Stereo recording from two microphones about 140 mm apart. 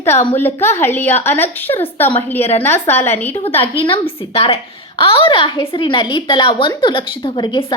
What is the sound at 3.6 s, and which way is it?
A woman's voice, 40° left (ahead or behind).